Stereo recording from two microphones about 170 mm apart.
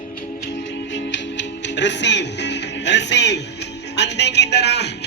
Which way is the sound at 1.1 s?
90° left.